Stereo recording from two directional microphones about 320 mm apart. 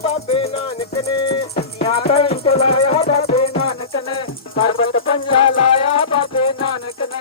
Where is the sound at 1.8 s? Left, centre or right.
Centre.